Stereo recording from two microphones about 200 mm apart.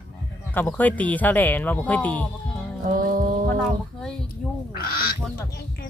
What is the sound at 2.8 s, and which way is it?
Speech, 45° right (ahead or behind).